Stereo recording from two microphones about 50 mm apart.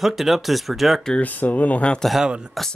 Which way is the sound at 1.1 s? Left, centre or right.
Left.